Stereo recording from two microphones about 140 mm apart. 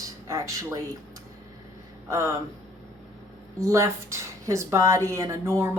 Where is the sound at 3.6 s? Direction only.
20° right (ahead or behind).